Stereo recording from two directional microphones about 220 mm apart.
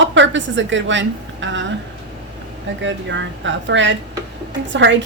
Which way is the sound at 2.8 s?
55° right (ahead or behind).